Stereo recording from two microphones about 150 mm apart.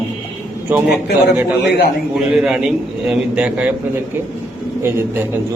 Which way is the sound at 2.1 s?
5° right (ahead or behind).